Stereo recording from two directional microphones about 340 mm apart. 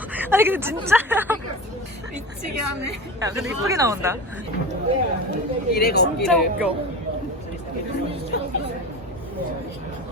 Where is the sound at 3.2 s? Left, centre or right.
Centre.